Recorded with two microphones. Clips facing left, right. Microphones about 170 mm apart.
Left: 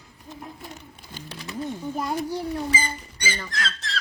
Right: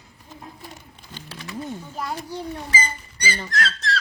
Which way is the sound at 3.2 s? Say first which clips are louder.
Right 3 dB; 35° right (ahead or behind).